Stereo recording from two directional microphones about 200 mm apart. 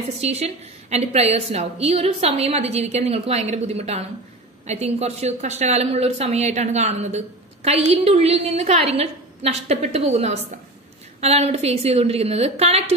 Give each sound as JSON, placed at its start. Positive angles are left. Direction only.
{"t": 0.2, "sound": "a woman's voice", "side_deg": -35}